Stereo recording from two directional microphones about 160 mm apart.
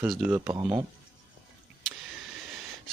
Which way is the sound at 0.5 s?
30° right (ahead or behind).